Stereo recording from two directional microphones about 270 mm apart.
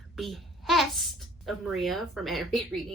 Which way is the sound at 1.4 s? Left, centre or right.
Centre.